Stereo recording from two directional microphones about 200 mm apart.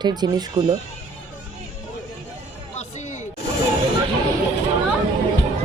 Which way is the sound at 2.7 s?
35° left (ahead or behind).